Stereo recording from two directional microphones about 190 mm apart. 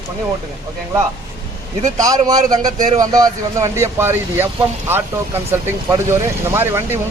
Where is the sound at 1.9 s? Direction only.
20° right (ahead or behind).